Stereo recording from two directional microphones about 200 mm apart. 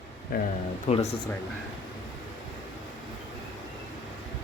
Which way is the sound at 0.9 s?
35° left (ahead or behind).